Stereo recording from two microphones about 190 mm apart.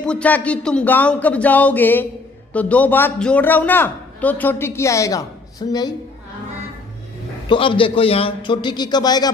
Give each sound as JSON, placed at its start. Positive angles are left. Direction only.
{"t": 0.0, "sound": "a man's voice", "side_deg": 5}
{"t": 7.4, "sound": "a man's voice", "side_deg": 25}